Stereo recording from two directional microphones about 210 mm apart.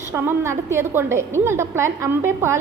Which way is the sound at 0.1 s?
10° right (ahead or behind).